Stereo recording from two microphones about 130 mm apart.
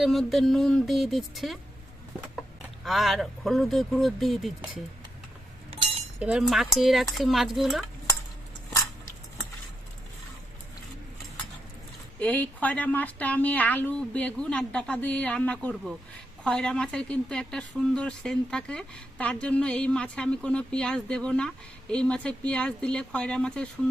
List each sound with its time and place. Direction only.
0.0 s speech: centre (ahead or behind)
5.7 s chink: 55° right (ahead or behind)
6.1 s speech: 10° right (ahead or behind)
12.2 s speech: 10° left (ahead or behind)